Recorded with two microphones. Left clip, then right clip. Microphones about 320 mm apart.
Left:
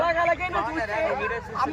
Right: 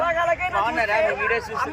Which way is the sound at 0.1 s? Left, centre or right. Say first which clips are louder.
Right 1 dB; centre.